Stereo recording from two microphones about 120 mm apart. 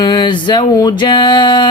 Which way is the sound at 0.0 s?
40° left (ahead or behind).